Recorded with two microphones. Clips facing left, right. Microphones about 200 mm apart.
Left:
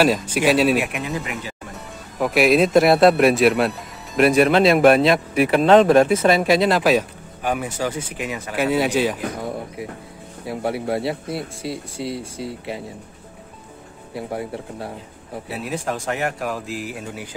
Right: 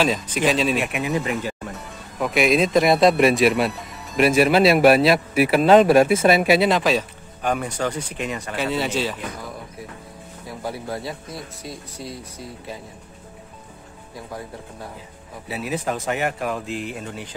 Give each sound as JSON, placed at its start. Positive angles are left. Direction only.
{"t": 0.0, "sound": "speech", "side_deg": 10}
{"t": 1.2, "sound": "speech", "side_deg": -40}
{"t": 2.1, "sound": "speech", "side_deg": 0}
{"t": 6.8, "sound": "speech", "side_deg": 10}
{"t": 9.4, "sound": "speech", "side_deg": 25}
{"t": 11.3, "sound": "speech", "side_deg": 70}
{"t": 12.1, "sound": "speech", "side_deg": 25}
{"t": 15.4, "sound": "speech", "side_deg": 0}